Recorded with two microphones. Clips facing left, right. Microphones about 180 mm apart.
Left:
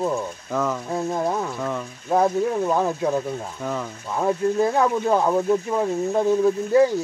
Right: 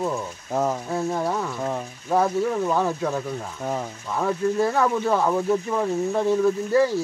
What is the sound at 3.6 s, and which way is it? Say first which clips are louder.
Speech: right 1 dB; 90° left.